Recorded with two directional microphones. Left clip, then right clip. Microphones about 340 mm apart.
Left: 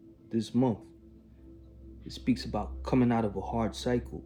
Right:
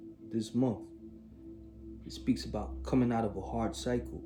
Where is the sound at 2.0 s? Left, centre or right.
Left.